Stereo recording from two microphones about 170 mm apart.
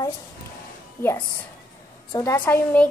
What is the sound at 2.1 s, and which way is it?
Speech, 15° left (ahead or behind).